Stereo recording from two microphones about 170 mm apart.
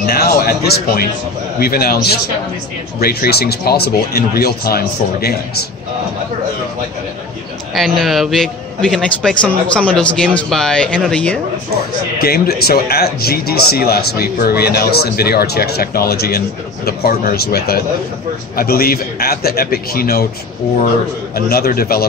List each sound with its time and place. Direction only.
0.0 s speech: 65° left (ahead or behind)
7.7 s a man's voice: centre (ahead or behind)
12.2 s speech: 65° left (ahead or behind)
21.4 s speech: 60° left (ahead or behind)